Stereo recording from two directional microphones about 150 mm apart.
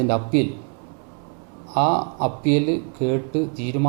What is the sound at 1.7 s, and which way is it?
Speech, 15° right (ahead or behind).